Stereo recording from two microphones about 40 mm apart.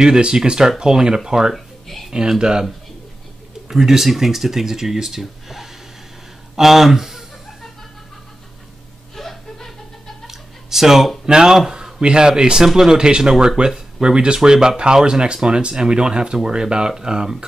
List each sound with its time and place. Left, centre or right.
0.0 s speech: centre
1.5 s a sound: centre
2.1 s speech: centre
3.6 s speech: centre
6.5 s chuckle: centre
9.1 s whimper: centre
10.2 s a sound: centre
11.2 s speech: centre